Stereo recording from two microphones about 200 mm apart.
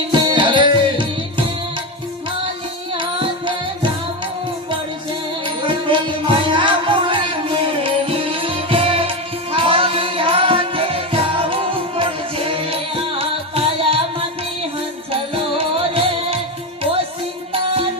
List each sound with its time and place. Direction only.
0.1 s music: 20° right (ahead or behind)
3.0 s carnatic music: 25° right (ahead or behind)
5.6 s music: 25° right (ahead or behind)
15.1 s music: 30° right (ahead or behind)